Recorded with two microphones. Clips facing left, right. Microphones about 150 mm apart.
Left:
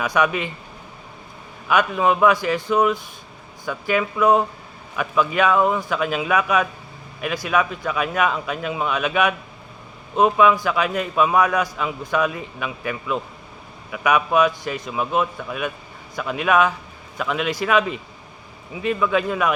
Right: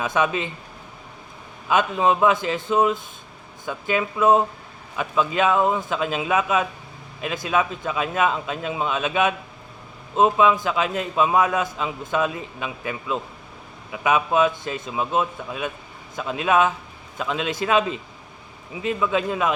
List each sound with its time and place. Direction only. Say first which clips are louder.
0.0 s a man's voice: left 2 dB; 25° right (ahead or behind)
1.6 s a man's voice: left 1 dB; 25° right (ahead or behind)